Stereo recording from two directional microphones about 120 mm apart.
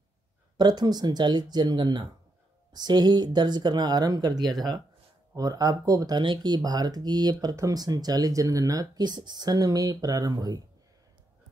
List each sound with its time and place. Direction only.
0.6 s speech: 35° right (ahead or behind)